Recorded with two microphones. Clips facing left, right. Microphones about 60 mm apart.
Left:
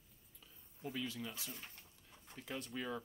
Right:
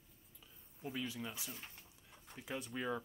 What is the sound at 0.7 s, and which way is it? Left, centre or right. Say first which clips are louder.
Speech: even; centre.